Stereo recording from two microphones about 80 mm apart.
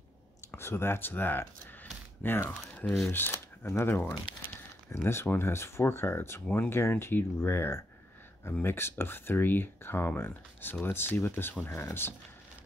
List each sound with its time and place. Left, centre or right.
0.6 s speech: left
2.7 s speech: centre